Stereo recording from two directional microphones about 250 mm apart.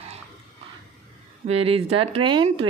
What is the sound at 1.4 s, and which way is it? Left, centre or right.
Speech, right.